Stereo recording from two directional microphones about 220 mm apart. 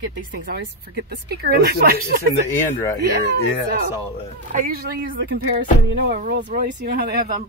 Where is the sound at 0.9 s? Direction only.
45° right (ahead or behind).